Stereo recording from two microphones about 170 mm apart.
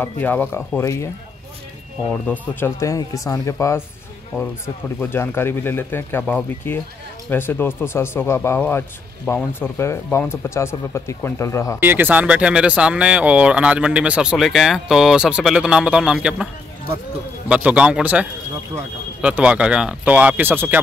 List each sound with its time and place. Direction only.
0.0 s speech: 10° left (ahead or behind)
2.2 s speech: 10° left (ahead or behind)
11.8 s speech: 10° right (ahead or behind)
17.5 s speech: 5° right (ahead or behind)